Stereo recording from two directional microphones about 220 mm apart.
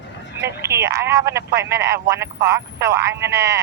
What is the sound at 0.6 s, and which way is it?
Speech, 10° right (ahead or behind).